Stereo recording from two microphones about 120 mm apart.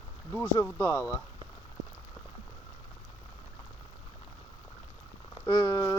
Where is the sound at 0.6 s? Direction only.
20° left (ahead or behind).